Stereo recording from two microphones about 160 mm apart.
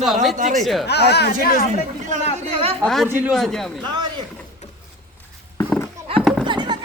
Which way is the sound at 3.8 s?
30° right (ahead or behind).